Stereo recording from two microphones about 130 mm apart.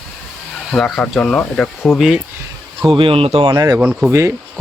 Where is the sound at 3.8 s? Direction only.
5° right (ahead or behind).